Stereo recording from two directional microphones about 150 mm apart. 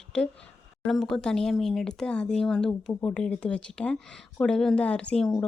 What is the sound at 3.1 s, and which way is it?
A woman's voice, 5° left (ahead or behind).